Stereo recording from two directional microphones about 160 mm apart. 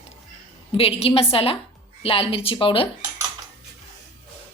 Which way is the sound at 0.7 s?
35° left (ahead or behind).